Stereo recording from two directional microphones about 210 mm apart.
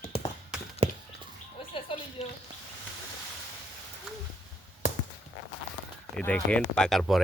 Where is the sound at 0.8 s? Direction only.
30° right (ahead or behind).